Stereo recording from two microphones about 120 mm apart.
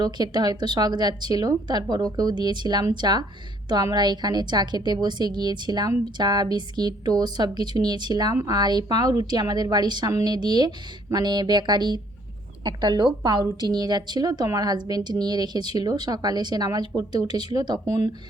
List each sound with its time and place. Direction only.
0.0 s a woman's voice: 35° right (ahead or behind)